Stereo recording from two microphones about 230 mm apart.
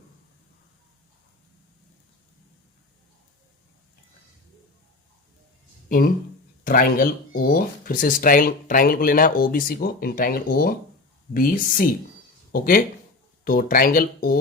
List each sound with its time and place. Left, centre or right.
6.7 s speech: left